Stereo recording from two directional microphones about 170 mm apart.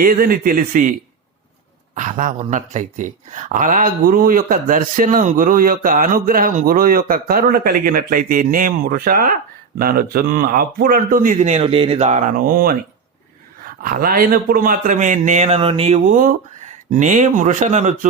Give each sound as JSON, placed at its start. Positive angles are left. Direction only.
{"t": 0.0, "sound": "speech", "side_deg": -60}
{"t": 2.0, "sound": "speech", "side_deg": -50}
{"t": 13.8, "sound": "a man's voice", "side_deg": -55}
{"t": 16.0, "sound": "a man's voice", "side_deg": -50}